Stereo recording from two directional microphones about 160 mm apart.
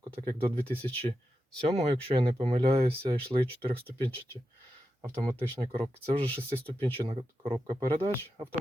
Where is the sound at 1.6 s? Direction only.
40° right (ahead or behind).